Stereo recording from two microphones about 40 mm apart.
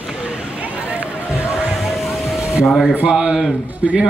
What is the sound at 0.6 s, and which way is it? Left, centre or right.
Run, right.